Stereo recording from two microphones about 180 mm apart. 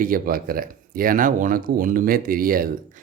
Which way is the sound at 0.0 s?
55° right (ahead or behind).